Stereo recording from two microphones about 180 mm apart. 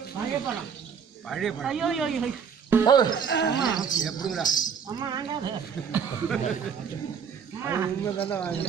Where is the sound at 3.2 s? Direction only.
70° left (ahead or behind).